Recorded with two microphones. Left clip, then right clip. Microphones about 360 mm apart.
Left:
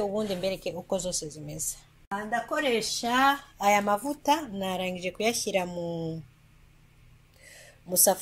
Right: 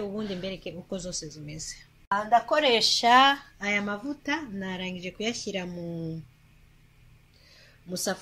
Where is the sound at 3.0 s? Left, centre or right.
Centre.